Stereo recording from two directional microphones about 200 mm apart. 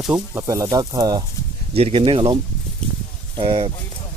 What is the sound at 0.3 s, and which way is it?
Speech, 15° right (ahead or behind).